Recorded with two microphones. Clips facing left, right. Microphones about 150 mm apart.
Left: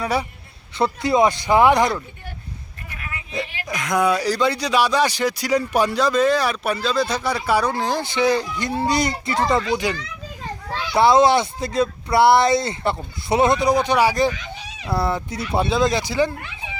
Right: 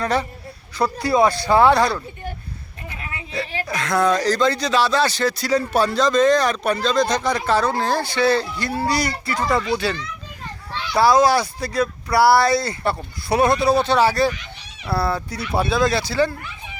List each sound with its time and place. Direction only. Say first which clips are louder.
0.0 s speech: right 1 dB; 10° left (ahead or behind)
0.8 s speech: even; 20° left (ahead or behind)
3.0 s a sound: even; 30° right (ahead or behind)
3.7 s speech: even; 15° left (ahead or behind)